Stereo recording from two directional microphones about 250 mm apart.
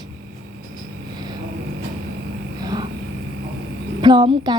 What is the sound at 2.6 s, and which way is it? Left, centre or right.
Vehicle, centre.